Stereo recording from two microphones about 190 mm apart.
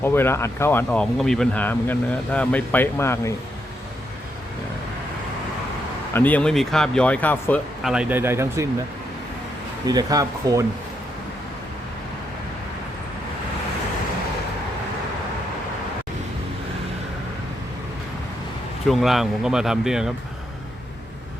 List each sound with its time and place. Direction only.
0.0 s speech: 10° left (ahead or behind)
6.1 s speech: 10° left (ahead or behind)
7.9 s speech: 5° right (ahead or behind)
9.8 s speech: 20° right (ahead or behind)
18.9 s speech: centre (ahead or behind)